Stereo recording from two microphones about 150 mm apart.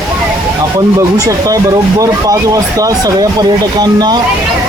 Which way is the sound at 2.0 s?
20° right (ahead or behind).